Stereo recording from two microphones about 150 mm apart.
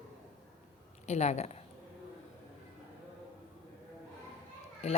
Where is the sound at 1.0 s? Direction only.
50° left (ahead or behind).